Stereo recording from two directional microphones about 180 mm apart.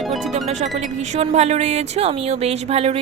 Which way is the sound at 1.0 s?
40° right (ahead or behind).